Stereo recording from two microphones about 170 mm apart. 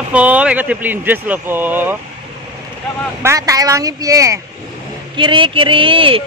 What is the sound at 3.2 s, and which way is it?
Speech, 15° right (ahead or behind).